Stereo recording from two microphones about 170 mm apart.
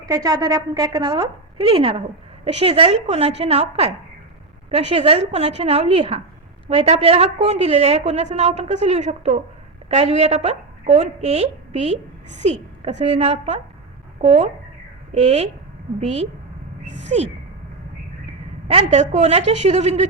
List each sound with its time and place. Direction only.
0.0 s a woman's voice: 20° right (ahead or behind); by 17.2 s 40° right (ahead or behind)
18.7 s a woman's voice: 35° right (ahead or behind)